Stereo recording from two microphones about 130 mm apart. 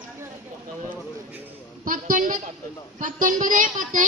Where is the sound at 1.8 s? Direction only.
90° right.